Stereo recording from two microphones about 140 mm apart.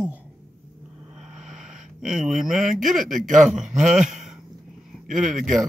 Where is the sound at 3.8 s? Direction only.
5° right (ahead or behind).